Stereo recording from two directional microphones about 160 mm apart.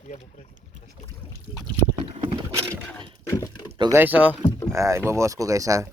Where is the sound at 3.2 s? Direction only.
20° left (ahead or behind).